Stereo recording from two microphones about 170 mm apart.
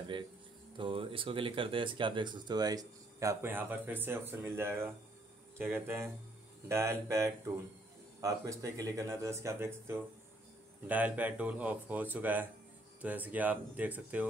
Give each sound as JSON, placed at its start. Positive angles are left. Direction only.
{"t": 0.7, "sound": "speech", "side_deg": -30}